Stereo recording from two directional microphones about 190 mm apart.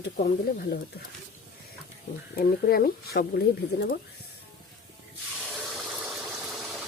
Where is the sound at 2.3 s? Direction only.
50° left (ahead or behind).